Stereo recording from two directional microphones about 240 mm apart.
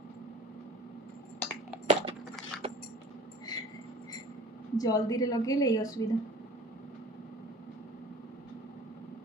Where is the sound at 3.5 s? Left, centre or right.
Centre.